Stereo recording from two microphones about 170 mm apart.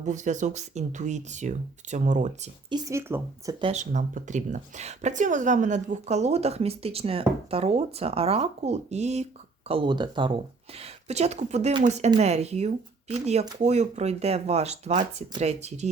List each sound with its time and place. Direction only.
0.0 s speech: 45° right (ahead or behind)
2.6 s speech: 20° right (ahead or behind)
3.6 s speech: 40° right (ahead or behind)
10.8 s speech: 40° right (ahead or behind)